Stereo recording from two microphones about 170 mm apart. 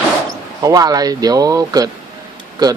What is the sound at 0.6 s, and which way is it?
A man's voice, 20° right (ahead or behind).